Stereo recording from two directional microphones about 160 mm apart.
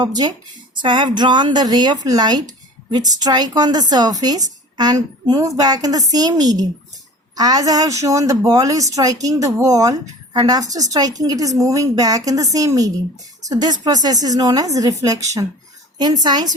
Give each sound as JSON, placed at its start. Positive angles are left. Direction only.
{"t": 0.0, "sound": "a woman's voice", "side_deg": -25}